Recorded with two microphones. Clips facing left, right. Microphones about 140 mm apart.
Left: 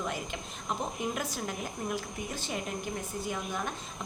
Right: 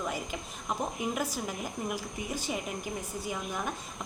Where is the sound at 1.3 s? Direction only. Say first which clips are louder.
Right 1 dB; 5° right (ahead or behind).